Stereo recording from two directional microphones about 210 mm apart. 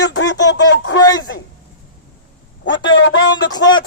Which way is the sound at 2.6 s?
60° left (ahead or behind).